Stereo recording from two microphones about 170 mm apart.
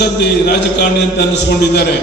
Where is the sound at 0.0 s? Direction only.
75° left (ahead or behind).